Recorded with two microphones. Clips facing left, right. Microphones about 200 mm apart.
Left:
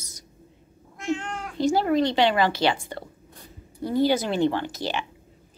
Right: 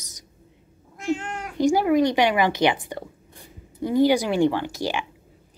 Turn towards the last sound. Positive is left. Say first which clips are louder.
# right 2 dB
turn(degrees=-15)  # may be behind; listen again after turning